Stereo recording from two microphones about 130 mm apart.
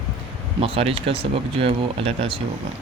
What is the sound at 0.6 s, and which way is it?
Speech, 50° right (ahead or behind).